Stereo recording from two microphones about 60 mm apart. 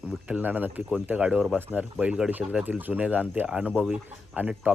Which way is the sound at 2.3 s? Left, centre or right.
Right.